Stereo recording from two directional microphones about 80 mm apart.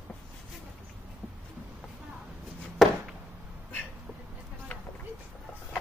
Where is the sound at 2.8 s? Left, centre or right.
Centre.